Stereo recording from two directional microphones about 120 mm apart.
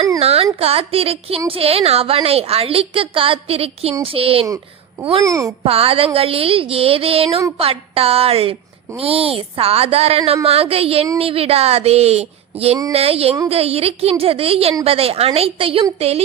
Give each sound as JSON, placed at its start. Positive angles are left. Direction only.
{"t": 0.2, "sound": "a sound", "side_deg": -60}
{"t": 0.6, "sound": "a woman's voice", "side_deg": -55}
{"t": 4.4, "sound": "a child's voice", "side_deg": -30}
{"t": 5.6, "sound": "a woman's voice", "side_deg": -55}